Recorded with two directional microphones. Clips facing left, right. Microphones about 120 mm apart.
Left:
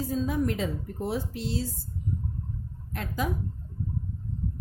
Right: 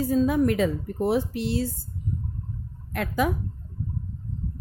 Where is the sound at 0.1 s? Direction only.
70° right (ahead or behind).